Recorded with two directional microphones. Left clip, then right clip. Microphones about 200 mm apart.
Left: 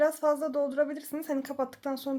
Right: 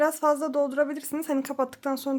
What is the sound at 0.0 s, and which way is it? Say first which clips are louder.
Speech: right 3 dB; 35° right (ahead or behind).